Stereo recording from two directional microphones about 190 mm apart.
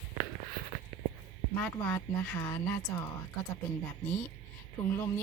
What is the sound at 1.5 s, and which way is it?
Speech, 10° left (ahead or behind).